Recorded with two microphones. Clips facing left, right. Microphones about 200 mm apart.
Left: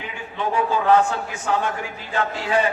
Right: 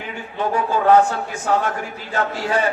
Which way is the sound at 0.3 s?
40° right (ahead or behind).